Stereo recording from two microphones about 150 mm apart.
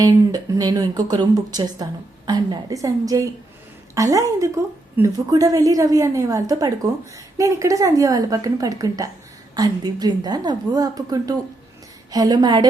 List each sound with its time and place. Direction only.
0.0 s a woman's voice: 25° right (ahead or behind)